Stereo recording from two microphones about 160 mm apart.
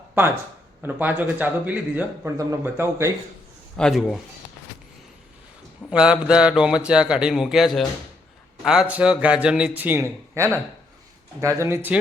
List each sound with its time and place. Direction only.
0.8 s a man's voice: 10° right (ahead or behind)
3.8 s a man's voice: centre (ahead or behind)
5.9 s a man's voice: 5° right (ahead or behind)
11.6 s a man's voice: 15° right (ahead or behind)